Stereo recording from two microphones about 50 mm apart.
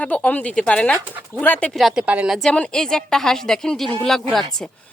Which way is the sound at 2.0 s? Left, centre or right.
Right.